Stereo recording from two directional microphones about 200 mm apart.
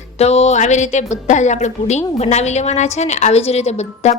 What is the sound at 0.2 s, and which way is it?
A woman's voice, 35° left (ahead or behind).